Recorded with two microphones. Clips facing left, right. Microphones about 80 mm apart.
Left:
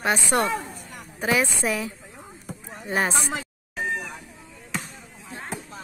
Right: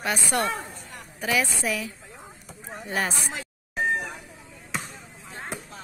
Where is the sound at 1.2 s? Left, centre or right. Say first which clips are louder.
Left 3 dB; left.